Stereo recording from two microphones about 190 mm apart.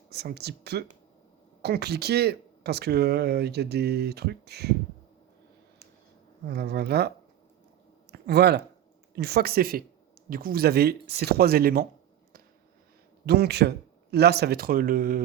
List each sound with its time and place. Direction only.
0.1 s speech: 60° right (ahead or behind)
6.5 s speech: 55° right (ahead or behind)
8.1 s speech: 60° right (ahead or behind)
13.2 s speech: 60° right (ahead or behind)